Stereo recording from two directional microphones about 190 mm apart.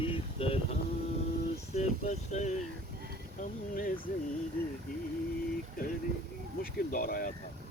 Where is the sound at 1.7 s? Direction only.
40° left (ahead or behind).